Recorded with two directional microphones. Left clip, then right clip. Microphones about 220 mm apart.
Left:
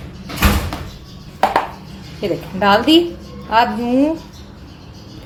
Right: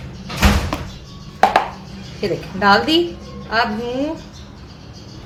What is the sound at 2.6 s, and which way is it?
A woman's voice, 25° left (ahead or behind).